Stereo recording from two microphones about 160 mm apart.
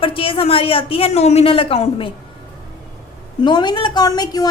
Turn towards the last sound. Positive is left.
turn(degrees=25)  # may be behind; listen again after turning